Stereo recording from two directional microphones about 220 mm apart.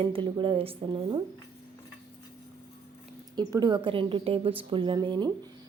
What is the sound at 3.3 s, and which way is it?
A woman's voice, 20° right (ahead or behind).